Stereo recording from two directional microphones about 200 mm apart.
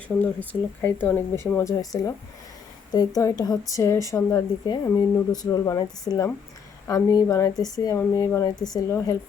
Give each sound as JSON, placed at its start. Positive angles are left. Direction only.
{"t": 0.2, "sound": "speech", "side_deg": 10}